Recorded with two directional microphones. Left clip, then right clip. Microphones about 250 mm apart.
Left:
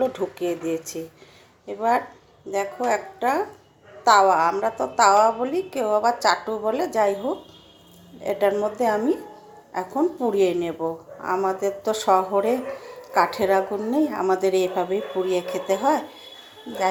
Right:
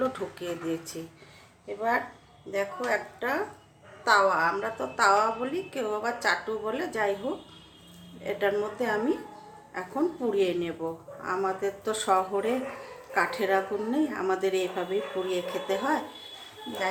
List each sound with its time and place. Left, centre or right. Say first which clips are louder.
0.1 s a woman's voice: left 8 dB; centre
8.2 s a woman's voice: left 6 dB; centre